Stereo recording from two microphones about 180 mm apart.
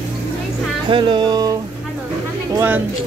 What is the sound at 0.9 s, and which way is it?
Speech, 25° right (ahead or behind).